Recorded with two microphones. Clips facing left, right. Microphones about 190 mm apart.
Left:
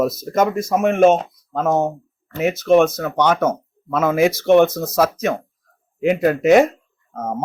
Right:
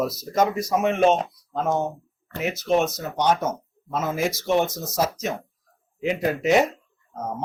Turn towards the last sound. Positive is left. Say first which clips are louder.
# left 5 dB
turn(degrees=45)  # may be behind; listen again after turning